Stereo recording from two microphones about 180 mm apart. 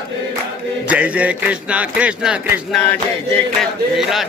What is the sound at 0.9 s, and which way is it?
Mantra, 5° right (ahead or behind).